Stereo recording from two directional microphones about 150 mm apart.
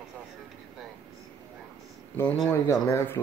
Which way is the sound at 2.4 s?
15° left (ahead or behind).